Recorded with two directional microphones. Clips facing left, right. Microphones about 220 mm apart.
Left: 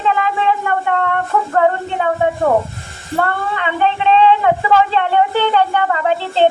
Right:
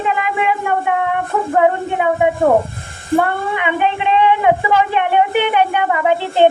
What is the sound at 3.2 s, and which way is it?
A woman's voice, 15° right (ahead or behind).